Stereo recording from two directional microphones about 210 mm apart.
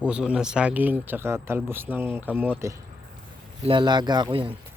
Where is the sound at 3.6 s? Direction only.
20° right (ahead or behind).